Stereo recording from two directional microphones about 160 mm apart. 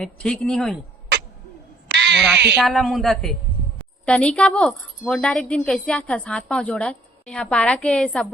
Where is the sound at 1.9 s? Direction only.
90° right.